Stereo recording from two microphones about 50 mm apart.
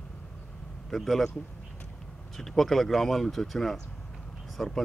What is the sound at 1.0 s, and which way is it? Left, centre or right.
Speech, centre.